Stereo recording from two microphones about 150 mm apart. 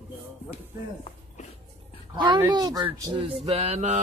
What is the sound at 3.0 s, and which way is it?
Music, 35° right (ahead or behind).